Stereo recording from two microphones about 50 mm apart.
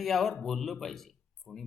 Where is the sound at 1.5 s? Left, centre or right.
Left.